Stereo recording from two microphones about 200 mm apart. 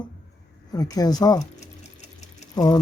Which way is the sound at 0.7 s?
20° left (ahead or behind).